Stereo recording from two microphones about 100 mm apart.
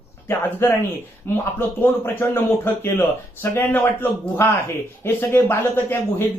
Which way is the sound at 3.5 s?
20° left (ahead or behind).